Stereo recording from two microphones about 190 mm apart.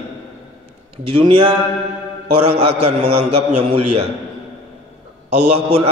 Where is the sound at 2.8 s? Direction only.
30° right (ahead or behind).